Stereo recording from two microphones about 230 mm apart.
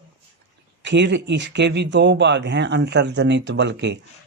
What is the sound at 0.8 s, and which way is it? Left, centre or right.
Speech, right.